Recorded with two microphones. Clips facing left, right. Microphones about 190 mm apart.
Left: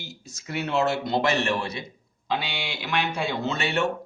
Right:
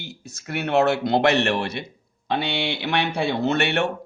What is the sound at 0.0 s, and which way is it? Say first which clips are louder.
Speech: right 3 dB; 60° right (ahead or behind).